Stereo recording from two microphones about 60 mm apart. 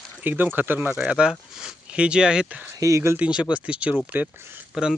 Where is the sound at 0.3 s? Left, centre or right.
Right.